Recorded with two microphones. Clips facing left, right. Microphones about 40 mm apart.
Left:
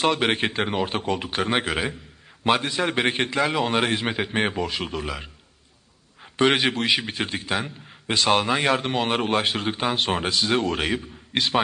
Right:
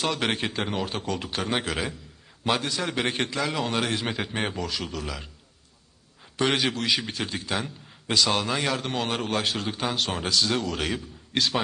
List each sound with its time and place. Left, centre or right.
0.2 s a man's voice: left
6.3 s a man's voice: left